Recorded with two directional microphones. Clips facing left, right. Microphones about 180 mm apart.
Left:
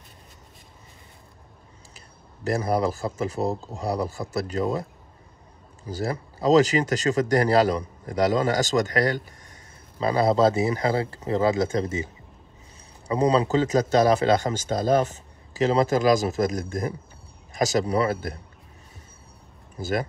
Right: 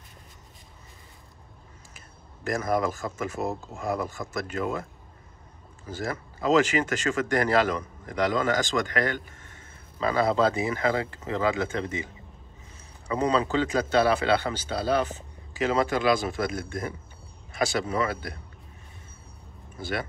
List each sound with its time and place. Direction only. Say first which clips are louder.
2.0 s speech: left 4 dB; 35° left (ahead or behind)
5.9 s speech: left 4 dB; 35° left (ahead or behind)
13.1 s speech: left 4 dB; 35° left (ahead or behind)
19.8 s speech: left 5 dB; 40° left (ahead or behind)